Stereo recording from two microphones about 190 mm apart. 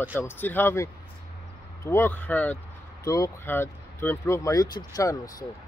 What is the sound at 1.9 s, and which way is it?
Speech, 10° left (ahead or behind).